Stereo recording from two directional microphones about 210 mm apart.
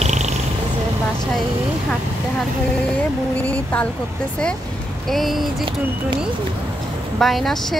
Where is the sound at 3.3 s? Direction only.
5° left (ahead or behind).